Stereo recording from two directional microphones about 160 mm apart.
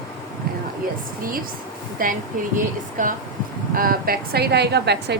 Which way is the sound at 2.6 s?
60° right (ahead or behind).